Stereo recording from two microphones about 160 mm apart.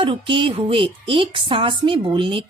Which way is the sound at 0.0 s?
30° right (ahead or behind).